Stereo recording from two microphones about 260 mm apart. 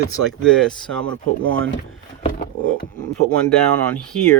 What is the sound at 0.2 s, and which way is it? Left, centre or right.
Speech, right.